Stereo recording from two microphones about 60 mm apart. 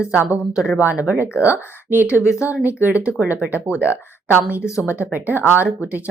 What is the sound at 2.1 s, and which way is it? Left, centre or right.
Speech, left.